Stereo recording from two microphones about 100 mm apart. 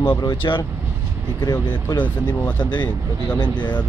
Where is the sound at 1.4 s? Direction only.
40° left (ahead or behind).